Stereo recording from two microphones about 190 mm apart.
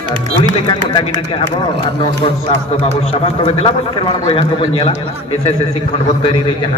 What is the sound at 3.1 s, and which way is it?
A man's voice, 30° left (ahead or behind).